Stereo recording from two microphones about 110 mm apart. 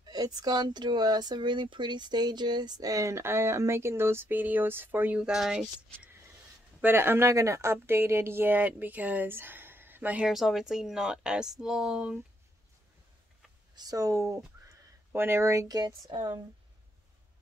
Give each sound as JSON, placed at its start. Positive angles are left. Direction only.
{"t": 0.0, "sound": "speech", "side_deg": -35}
{"t": 6.8, "sound": "speech", "side_deg": -20}
{"t": 10.3, "sound": "speech", "side_deg": 0}
{"t": 13.7, "sound": "speech", "side_deg": -35}